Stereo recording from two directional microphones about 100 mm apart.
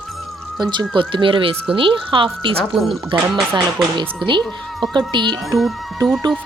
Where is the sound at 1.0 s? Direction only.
55° right (ahead or behind).